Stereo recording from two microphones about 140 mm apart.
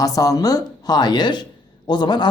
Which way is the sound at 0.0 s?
25° left (ahead or behind).